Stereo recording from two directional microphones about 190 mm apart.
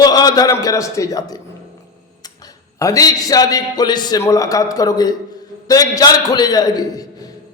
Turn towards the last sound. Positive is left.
turn(degrees=20)  # may be behind; listen again after turning